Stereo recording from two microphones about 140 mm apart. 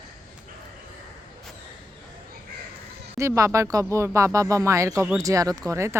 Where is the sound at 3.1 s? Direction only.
20° right (ahead or behind).